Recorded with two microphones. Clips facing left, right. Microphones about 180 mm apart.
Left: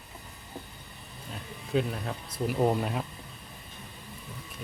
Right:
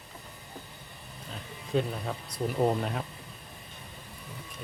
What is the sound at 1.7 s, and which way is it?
Speech, 5° left (ahead or behind).